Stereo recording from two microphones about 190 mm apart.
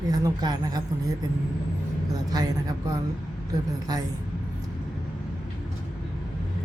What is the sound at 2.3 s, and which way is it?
Speech, 20° right (ahead or behind).